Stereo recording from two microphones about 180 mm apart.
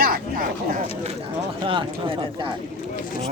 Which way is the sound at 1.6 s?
30° right (ahead or behind).